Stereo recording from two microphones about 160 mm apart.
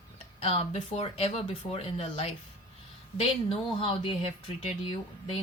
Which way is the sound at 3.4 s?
35° left (ahead or behind).